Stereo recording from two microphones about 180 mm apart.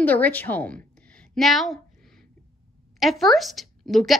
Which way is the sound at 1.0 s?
5° left (ahead or behind).